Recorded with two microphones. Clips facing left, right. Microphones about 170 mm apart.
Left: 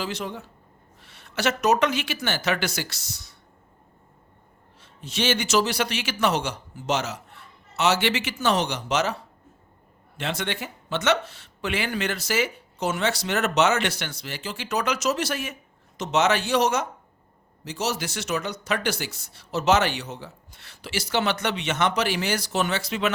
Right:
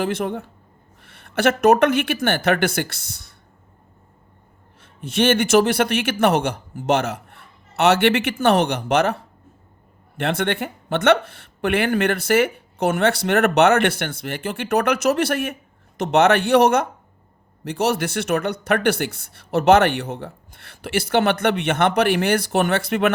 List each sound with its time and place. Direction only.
0.0 s speech: 55° right (ahead or behind)
4.8 s speech: 55° right (ahead or behind)